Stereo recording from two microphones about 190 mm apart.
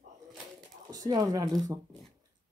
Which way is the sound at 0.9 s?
20° right (ahead or behind).